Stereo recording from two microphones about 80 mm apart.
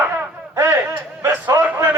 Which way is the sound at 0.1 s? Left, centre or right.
Right.